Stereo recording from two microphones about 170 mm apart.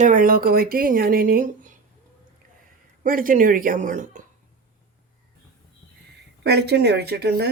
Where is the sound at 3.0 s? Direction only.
55° right (ahead or behind).